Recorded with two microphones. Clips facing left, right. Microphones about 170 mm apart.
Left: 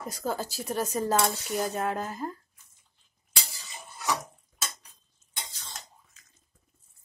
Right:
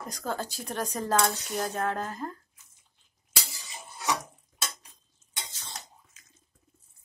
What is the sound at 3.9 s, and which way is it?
Bathtub, 20° right (ahead or behind).